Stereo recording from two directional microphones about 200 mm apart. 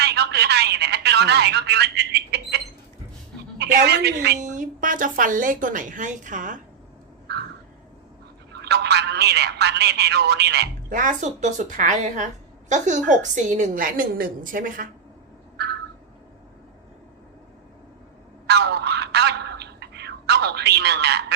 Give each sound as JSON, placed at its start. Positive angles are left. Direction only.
{"t": 0.0, "sound": "telephone", "side_deg": -55}
{"t": 3.6, "sound": "a woman's voice", "side_deg": -55}
{"t": 4.4, "sound": "a woman's voice", "side_deg": -40}
{"t": 8.6, "sound": "speech", "side_deg": -55}
{"t": 18.4, "sound": "a sound", "side_deg": -55}